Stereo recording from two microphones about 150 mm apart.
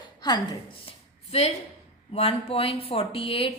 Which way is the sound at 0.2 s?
30° left (ahead or behind).